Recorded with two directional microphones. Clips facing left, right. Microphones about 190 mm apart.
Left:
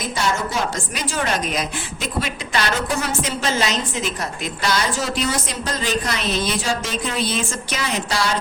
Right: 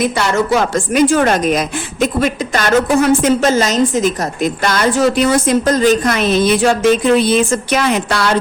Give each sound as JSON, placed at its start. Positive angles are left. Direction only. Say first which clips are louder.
{"t": 0.0, "sound": "a woman's voice", "louder": "right 8 dB", "side_deg": -70}